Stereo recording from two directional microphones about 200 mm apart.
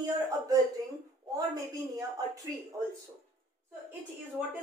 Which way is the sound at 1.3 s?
20° right (ahead or behind).